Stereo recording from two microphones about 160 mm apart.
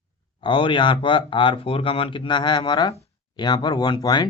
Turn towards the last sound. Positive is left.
turn(degrees=25)  # may be behind; listen again after turning